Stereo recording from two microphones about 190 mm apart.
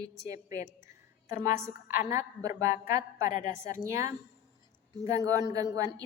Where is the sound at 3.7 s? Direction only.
15° right (ahead or behind).